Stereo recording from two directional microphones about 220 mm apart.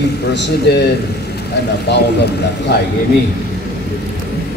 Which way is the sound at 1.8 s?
50° left (ahead or behind).